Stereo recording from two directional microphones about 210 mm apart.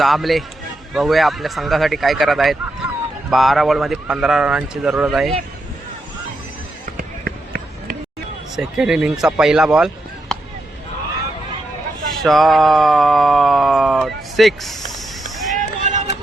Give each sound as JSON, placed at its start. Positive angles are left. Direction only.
{"t": 0.0, "sound": "speech", "side_deg": 0}
{"t": 6.9, "sound": "basketball bounce", "side_deg": -45}
{"t": 8.5, "sound": "speech", "side_deg": -5}
{"t": 12.2, "sound": "a sound", "side_deg": 0}
{"t": 15.5, "sound": "run", "side_deg": -35}